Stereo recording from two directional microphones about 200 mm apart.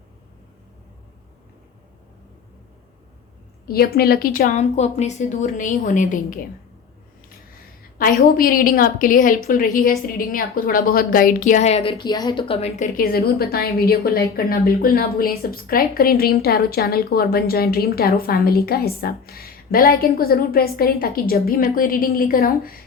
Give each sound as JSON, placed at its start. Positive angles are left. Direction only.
{"t": 3.7, "sound": "a woman's voice", "side_deg": 50}
{"t": 8.2, "sound": "a woman's voice", "side_deg": 45}
{"t": 13.0, "sound": "speech", "side_deg": 50}